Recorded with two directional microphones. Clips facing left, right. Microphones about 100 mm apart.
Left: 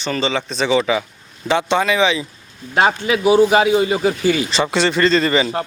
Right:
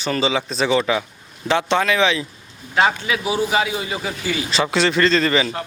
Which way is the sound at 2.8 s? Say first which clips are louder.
Left 8 dB; 25° left (ahead or behind).